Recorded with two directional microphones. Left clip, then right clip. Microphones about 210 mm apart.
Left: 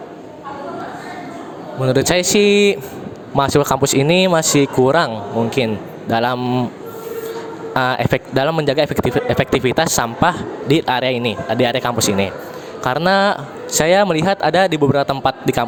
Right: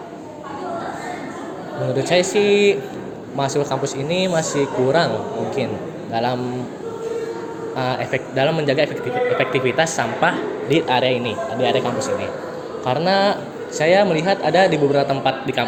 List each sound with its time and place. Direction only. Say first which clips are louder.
1.9 s speech: left 3 dB; 50° left (ahead or behind)
7.7 s speech: left 6 dB; 50° left (ahead or behind)